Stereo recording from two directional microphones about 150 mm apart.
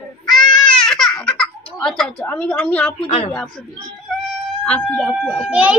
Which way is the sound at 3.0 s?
40° left (ahead or behind).